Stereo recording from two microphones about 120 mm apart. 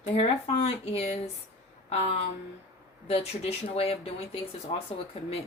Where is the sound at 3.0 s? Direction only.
60° left (ahead or behind).